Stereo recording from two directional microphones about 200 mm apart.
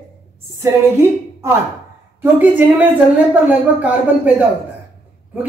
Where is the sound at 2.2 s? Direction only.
10° right (ahead or behind).